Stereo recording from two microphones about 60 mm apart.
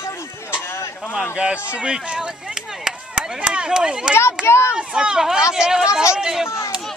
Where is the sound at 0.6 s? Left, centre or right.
Left.